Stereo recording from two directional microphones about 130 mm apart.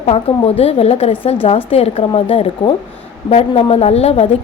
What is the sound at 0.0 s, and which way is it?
A woman's voice, 50° left (ahead or behind).